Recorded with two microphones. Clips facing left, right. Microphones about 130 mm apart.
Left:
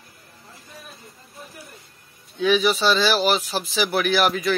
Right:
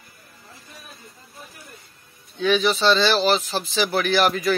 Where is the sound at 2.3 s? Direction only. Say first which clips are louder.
Left 1 dB; 5° left (ahead or behind).